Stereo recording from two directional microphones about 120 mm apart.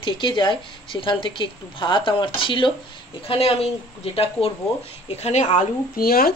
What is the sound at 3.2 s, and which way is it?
Speech, 55° left (ahead or behind).